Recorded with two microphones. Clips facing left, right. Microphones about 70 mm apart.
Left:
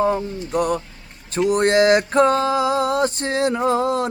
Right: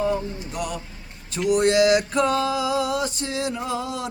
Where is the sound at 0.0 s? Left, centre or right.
Left.